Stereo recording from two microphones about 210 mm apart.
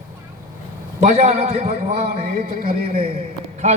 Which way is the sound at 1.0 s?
30° right (ahead or behind).